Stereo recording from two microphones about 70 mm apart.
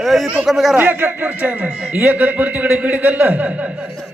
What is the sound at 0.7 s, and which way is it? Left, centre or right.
A man's voice, right.